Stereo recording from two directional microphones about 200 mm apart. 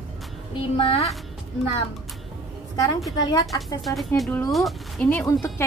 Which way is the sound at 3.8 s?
Centre (ahead or behind).